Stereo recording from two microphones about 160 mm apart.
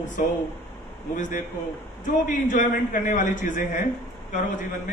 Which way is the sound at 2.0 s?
55° left (ahead or behind).